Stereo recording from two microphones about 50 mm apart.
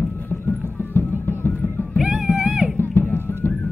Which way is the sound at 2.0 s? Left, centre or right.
Centre.